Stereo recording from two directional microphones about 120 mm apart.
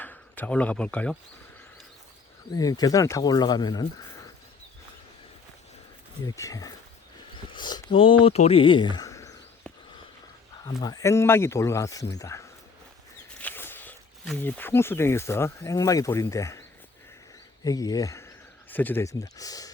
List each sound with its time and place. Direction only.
0.0 s speech: 15° left (ahead or behind)
2.5 s speech: 30° left (ahead or behind)
6.2 s speech: 30° left (ahead or behind)
9.7 s a sound: 10° left (ahead or behind)
10.8 s speech: 25° left (ahead or behind)
13.4 s a sound: 15° left (ahead or behind)
14.3 s speech: 15° left (ahead or behind)
18.7 s speech: 15° left (ahead or behind)
19.0 s speech: 30° left (ahead or behind)